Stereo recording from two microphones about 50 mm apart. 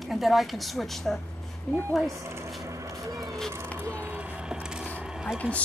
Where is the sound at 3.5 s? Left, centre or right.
Right.